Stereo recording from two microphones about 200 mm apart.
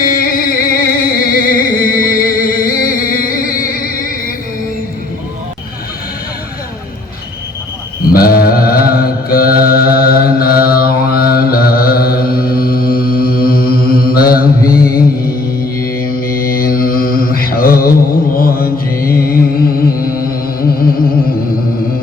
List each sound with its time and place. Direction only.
0.0 s music: 45° left (ahead or behind)
8.1 s mantra: 50° left (ahead or behind)
20.1 s music: 45° left (ahead or behind)